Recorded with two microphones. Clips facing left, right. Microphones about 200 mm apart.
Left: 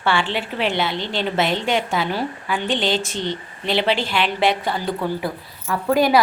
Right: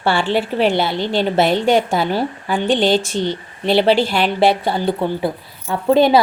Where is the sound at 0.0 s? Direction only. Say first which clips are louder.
Right 5 dB; 40° right (ahead or behind).